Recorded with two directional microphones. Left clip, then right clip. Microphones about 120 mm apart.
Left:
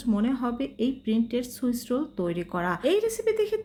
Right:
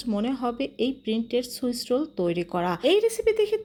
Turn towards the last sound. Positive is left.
turn(degrees=-20)  # may be behind; listen again after turning